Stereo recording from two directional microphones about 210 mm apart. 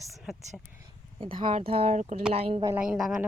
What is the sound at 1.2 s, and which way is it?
Speech, 25° right (ahead or behind).